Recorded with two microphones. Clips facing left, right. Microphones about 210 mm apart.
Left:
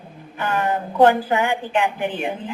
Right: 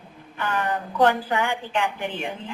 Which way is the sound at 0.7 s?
25° left (ahead or behind).